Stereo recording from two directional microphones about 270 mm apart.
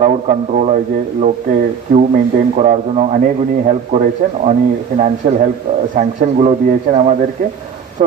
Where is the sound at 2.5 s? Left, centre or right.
Right.